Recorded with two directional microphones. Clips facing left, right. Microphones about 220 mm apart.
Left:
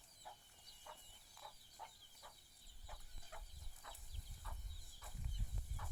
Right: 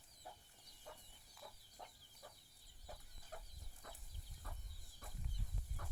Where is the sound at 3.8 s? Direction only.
45° right (ahead or behind).